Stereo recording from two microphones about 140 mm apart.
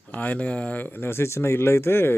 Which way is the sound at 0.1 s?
10° left (ahead or behind).